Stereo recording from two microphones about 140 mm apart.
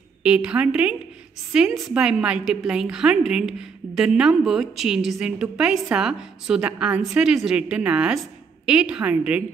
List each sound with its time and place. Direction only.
0.2 s a woman's voice: 10° right (ahead or behind)